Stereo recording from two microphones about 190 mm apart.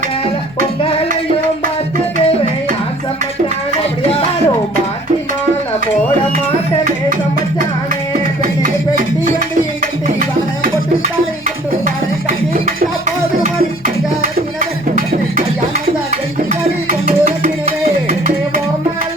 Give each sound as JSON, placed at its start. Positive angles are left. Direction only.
{"t": 13.4, "sound": "music", "side_deg": -45}
{"t": 17.1, "sound": "music", "side_deg": -45}